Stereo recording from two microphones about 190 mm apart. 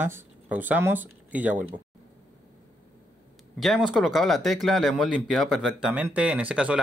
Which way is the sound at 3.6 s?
Centre (ahead or behind).